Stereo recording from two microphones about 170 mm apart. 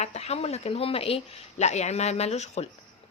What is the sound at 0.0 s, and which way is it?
A woman's voice, 40° left (ahead or behind).